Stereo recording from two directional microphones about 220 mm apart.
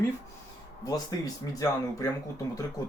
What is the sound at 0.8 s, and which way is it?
Speech, 15° left (ahead or behind).